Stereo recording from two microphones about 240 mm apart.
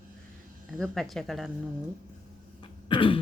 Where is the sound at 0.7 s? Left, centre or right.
Centre.